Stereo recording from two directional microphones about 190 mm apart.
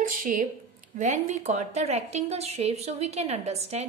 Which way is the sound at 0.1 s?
45° right (ahead or behind).